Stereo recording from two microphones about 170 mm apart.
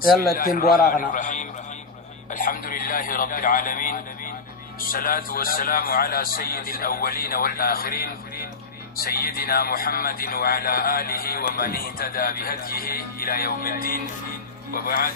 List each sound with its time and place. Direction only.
0.3 s a man's voice: 55° left (ahead or behind)